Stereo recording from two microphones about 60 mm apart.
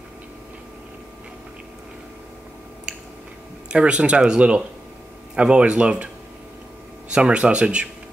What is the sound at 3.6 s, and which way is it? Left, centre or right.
Speech, centre.